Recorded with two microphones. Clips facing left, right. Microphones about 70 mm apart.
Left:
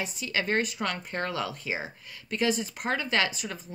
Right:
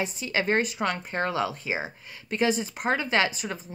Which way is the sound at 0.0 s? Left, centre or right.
Right.